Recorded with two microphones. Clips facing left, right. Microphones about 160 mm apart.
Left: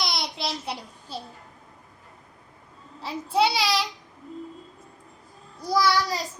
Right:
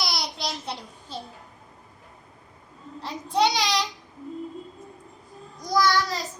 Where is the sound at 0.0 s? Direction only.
Centre (ahead or behind).